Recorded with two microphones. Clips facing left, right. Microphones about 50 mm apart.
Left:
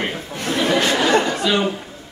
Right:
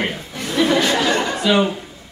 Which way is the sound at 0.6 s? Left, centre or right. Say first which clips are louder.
Right 2 dB; left.